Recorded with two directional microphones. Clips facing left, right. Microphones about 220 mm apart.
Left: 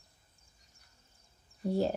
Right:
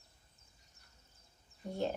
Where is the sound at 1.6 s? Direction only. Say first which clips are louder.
Left 7 dB; 35° left (ahead or behind).